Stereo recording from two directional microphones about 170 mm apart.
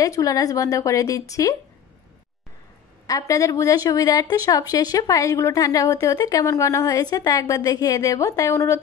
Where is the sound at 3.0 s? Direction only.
20° left (ahead or behind).